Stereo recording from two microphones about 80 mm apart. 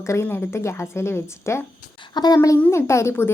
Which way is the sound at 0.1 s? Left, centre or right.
Left.